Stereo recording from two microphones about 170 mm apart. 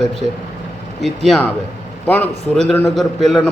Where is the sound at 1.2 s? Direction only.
5° left (ahead or behind).